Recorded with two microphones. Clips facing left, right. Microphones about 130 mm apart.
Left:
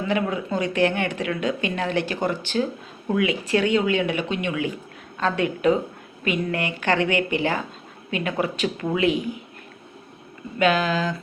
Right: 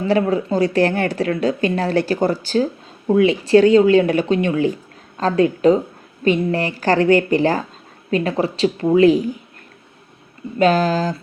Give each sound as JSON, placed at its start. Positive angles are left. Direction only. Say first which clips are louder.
{"t": 0.0, "sound": "a woman's voice", "louder": "right 7 dB", "side_deg": -35}
{"t": 10.6, "sound": "a woman's voice", "louder": "right 5 dB", "side_deg": -40}